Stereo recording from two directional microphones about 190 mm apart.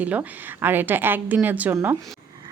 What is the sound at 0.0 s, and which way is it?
Speech, 10° right (ahead or behind).